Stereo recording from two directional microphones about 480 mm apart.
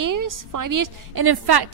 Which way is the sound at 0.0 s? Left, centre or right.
Right.